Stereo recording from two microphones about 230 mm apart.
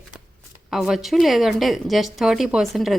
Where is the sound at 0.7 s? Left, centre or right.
Centre.